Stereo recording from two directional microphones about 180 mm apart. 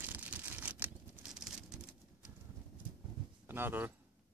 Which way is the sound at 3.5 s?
10° right (ahead or behind).